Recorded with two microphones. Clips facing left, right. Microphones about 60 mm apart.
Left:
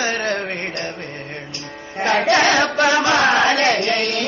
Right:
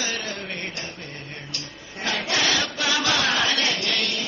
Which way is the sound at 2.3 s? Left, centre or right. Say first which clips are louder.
Left 8 dB; left.